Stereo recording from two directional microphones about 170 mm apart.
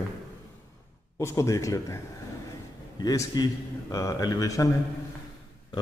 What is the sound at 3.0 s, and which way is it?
Speech, 20° left (ahead or behind).